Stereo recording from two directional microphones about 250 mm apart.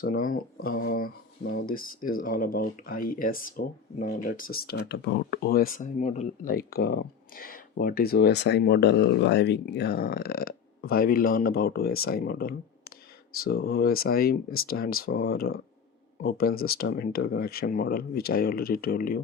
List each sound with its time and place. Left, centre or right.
0.0 s speech: left
16.6 s speech: left